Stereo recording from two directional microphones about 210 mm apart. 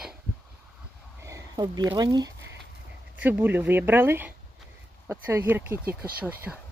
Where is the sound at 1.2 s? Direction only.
15° right (ahead or behind).